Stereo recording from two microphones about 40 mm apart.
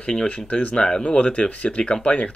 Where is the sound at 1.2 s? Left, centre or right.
Left.